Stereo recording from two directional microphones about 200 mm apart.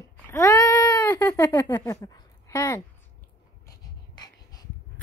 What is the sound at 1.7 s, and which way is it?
Speech, 20° left (ahead or behind).